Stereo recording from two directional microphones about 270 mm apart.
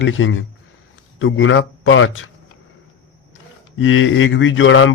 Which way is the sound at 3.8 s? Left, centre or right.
Left.